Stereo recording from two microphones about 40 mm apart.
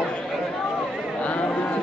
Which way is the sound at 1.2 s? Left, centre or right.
Left.